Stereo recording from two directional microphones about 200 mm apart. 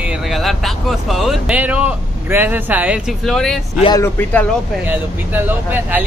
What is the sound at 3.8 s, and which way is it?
Speech, 20° left (ahead or behind).